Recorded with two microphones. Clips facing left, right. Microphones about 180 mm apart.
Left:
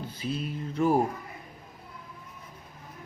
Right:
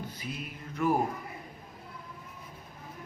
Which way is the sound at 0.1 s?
30° left (ahead or behind).